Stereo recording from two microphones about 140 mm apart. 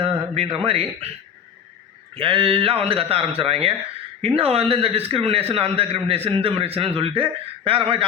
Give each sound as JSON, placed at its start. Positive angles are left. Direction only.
{"t": 0.0, "sound": "speech", "side_deg": -45}
{"t": 2.1, "sound": "speech", "side_deg": -35}